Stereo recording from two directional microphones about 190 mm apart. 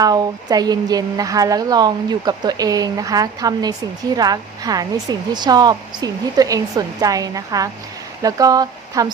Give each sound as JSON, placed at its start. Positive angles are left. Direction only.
{"t": 0.0, "sound": "a woman's voice", "side_deg": -20}